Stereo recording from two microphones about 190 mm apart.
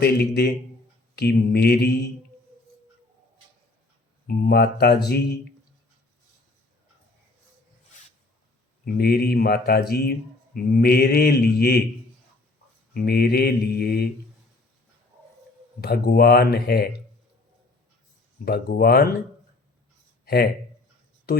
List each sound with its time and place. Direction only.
0.0 s speech: 55° left (ahead or behind)
4.3 s speech: 55° left (ahead or behind)
8.8 s speech: 55° left (ahead or behind)
12.9 s speech: 50° left (ahead or behind)
15.8 s speech: 55° left (ahead or behind)
18.4 s speech: 55° left (ahead or behind)
20.2 s speech: 55° left (ahead or behind)